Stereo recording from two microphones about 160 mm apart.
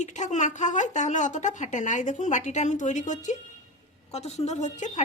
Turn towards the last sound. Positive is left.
turn(degrees=50)  # may be behind; listen again after turning